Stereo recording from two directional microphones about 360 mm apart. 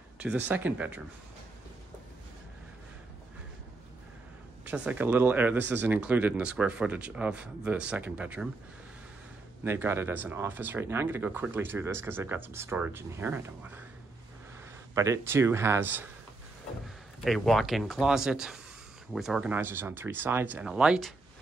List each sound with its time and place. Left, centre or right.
0.5 s speech: centre
4.6 s speech: centre
9.7 s speech: centre
15.0 s speech: centre